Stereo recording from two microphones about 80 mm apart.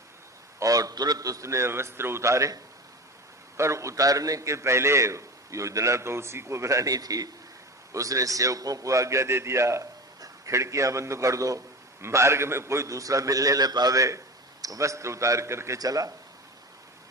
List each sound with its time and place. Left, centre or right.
0.6 s a man's voice: right
15.8 s speech: right